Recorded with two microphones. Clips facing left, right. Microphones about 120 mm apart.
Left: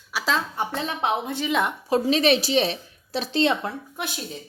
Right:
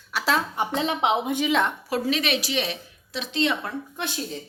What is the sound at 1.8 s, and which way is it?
A woman's voice, 25° left (ahead or behind).